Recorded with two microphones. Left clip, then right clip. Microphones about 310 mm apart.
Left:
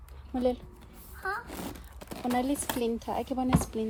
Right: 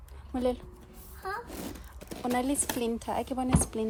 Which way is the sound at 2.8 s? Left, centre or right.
Right.